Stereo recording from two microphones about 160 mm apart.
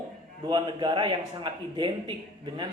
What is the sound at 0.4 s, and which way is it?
Speech, 30° right (ahead or behind).